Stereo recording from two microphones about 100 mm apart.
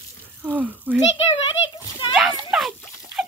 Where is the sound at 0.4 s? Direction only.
15° right (ahead or behind).